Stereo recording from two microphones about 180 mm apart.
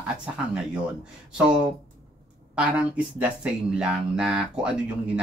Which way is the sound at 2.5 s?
5° right (ahead or behind).